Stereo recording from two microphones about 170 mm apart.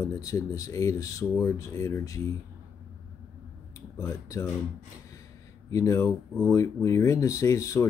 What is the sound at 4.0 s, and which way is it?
Speech, 15° left (ahead or behind).